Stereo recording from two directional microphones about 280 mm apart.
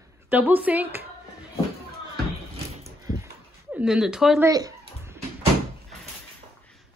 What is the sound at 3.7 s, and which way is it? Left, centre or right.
Speech, centre.